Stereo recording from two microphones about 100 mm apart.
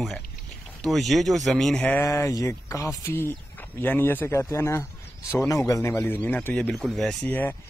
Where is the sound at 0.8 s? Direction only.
Centre (ahead or behind).